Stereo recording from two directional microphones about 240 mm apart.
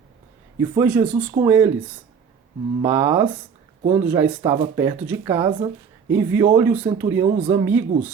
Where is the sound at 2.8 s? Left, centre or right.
Centre.